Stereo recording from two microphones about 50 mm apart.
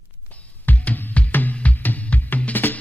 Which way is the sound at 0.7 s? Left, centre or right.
Left.